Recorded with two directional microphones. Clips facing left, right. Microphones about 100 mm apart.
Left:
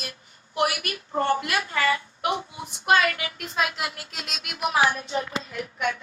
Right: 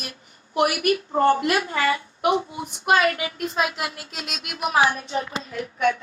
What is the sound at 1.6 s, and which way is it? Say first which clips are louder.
A woman's voice: right 2 dB; 20° right (ahead or behind).